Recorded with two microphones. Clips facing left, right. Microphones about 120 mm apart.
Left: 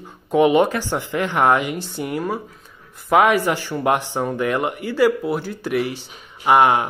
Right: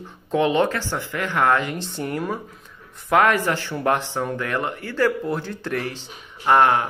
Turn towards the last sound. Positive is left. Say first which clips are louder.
# left 2 dB
turn(degrees=10)  # may be behind; listen again after turning